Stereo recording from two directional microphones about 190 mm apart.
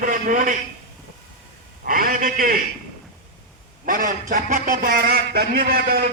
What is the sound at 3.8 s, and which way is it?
A man's voice, 45° right (ahead or behind).